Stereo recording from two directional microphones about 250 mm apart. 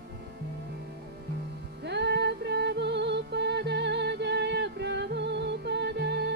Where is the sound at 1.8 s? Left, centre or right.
Right.